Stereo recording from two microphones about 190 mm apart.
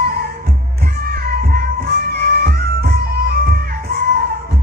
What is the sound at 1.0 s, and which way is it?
Music, 50° right (ahead or behind).